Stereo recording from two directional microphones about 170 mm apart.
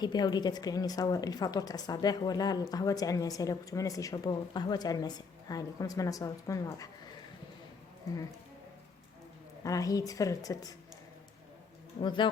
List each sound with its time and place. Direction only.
0.0 s a woman's voice: 25° left (ahead or behind)
9.6 s a woman's voice: 20° left (ahead or behind)
11.9 s a woman's voice: 30° left (ahead or behind)